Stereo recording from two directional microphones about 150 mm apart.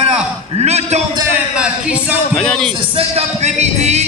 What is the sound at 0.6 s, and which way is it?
Speech, 45° right (ahead or behind).